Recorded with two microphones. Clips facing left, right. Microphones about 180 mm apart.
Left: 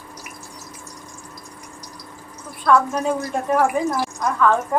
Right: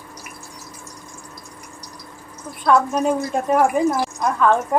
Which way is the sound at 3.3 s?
15° right (ahead or behind).